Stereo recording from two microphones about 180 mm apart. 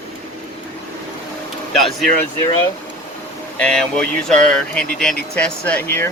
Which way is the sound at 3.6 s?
5° left (ahead or behind).